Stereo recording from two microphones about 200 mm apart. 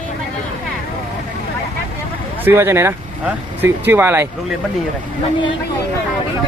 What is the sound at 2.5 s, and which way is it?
Speech, 10° right (ahead or behind).